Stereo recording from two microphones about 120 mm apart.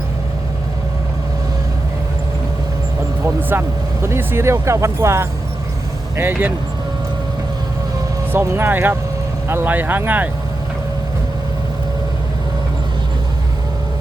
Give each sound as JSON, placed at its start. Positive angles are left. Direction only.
{"t": 3.5, "sound": "speech", "side_deg": -20}
{"t": 8.3, "sound": "speech", "side_deg": -20}